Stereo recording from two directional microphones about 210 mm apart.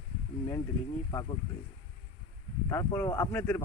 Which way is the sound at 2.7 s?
15° left (ahead or behind).